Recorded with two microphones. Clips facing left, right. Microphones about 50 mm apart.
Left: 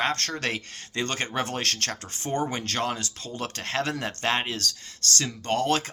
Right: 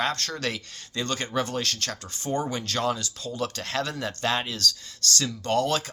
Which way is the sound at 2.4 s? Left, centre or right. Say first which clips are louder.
Right 1 dB; left.